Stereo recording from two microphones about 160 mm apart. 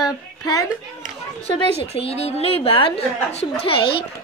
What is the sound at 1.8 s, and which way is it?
A woman's voice, 40° left (ahead or behind).